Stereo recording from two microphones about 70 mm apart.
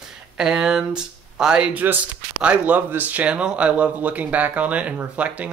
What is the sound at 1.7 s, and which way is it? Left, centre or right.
Speech, right.